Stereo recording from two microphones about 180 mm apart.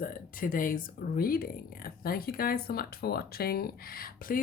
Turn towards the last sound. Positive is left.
turn(degrees=55)  # may be behind; listen again after turning